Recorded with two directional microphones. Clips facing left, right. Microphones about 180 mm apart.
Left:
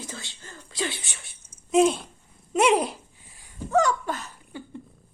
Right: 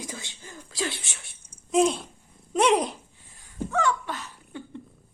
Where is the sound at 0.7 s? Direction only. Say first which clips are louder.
Even; centre (ahead or behind).